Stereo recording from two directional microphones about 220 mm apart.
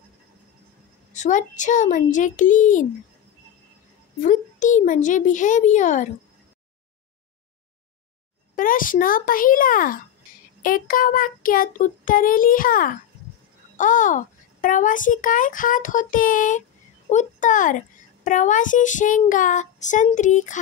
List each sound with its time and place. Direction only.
1.1 s a child's voice: 35° left (ahead or behind)
4.2 s a child's voice: 35° left (ahead or behind)
8.5 s a child's voice: 40° left (ahead or behind)